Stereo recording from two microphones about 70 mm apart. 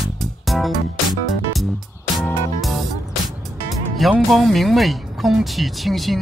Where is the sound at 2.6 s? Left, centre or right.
Centre.